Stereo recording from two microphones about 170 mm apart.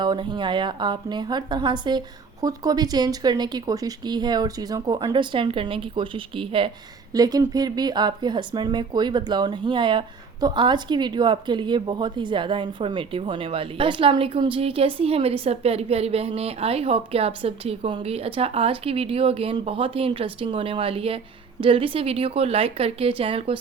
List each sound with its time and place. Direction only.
0.0 s a woman's voice: 25° right (ahead or behind)